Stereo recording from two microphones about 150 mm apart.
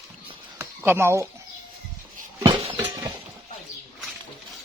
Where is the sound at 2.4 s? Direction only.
35° right (ahead or behind).